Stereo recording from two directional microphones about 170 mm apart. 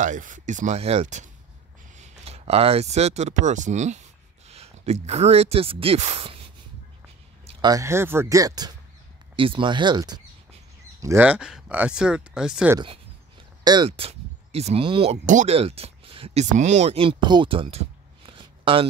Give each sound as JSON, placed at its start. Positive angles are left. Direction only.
{"t": 0.0, "sound": "speech", "side_deg": -50}
{"t": 7.6, "sound": "speech", "side_deg": -20}
{"t": 13.7, "sound": "speech", "side_deg": -30}
{"t": 15.2, "sound": "speech", "side_deg": -45}
{"t": 15.5, "sound": "speech", "side_deg": -35}